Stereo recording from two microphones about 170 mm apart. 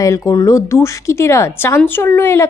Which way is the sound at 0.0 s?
20° left (ahead or behind).